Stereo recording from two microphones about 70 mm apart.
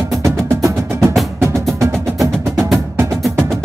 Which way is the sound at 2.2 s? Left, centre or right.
Centre.